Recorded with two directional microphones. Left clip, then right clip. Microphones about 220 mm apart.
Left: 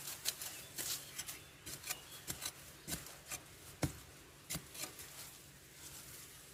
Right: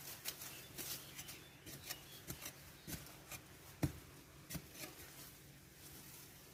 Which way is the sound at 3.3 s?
10° left (ahead or behind).